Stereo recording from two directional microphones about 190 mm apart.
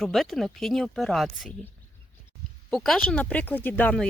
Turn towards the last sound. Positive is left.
turn(degrees=10)  # may be behind; listen again after turning